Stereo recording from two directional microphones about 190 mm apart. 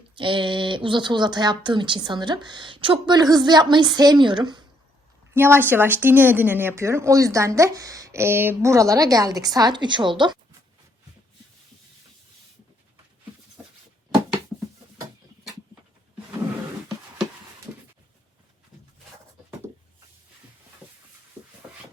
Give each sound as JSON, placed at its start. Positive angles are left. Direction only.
{"t": 0.2, "sound": "speech", "side_deg": -25}
{"t": 5.3, "sound": "a woman's voice", "side_deg": -10}
{"t": 13.6, "sound": "a sound", "side_deg": -15}